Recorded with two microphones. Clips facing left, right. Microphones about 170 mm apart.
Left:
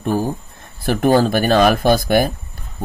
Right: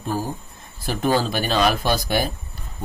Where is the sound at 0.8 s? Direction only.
55° left (ahead or behind).